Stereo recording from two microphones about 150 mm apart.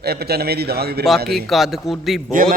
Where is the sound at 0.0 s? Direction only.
90° right.